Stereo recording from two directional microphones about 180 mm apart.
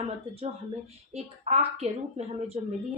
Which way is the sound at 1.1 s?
35° right (ahead or behind).